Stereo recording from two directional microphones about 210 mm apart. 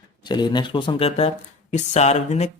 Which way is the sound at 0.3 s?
20° left (ahead or behind).